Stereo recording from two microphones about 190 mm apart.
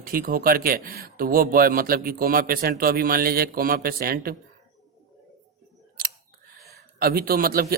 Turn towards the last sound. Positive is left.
turn(degrees=-50)  # may be behind; listen again after turning